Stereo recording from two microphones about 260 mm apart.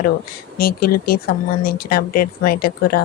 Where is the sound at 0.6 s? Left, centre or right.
Left.